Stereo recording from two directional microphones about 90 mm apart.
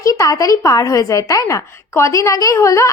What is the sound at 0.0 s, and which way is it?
A woman's voice, 35° left (ahead or behind).